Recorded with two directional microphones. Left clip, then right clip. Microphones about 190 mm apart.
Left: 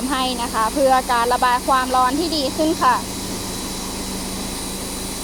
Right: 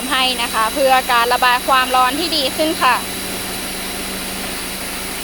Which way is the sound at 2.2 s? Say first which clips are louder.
Right 3 dB; 30° left (ahead or behind).